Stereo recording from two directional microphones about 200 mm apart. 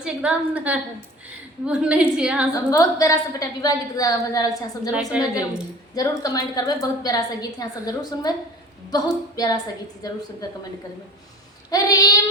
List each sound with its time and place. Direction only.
0.0 s a woman's voice: 5° right (ahead or behind)
2.6 s a woman's voice: 15° left (ahead or behind)
5.1 s a woman's voice: 5° right (ahead or behind)
5.9 s a woman's voice: 20° left (ahead or behind)
11.7 s a woman's voice: 20° left (ahead or behind)